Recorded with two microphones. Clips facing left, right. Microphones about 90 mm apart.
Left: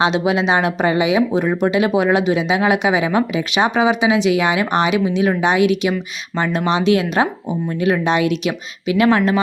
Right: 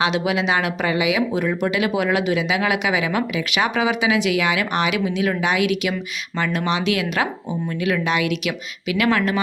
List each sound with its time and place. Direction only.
0.0 s speech: 25° left (ahead or behind)